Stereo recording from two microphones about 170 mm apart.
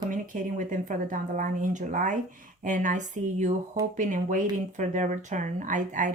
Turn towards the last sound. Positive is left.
turn(degrees=-50)  # may be behind; listen again after turning